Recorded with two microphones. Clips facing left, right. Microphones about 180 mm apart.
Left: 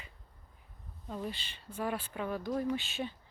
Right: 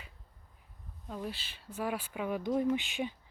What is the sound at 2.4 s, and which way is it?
Speech, 20° right (ahead or behind).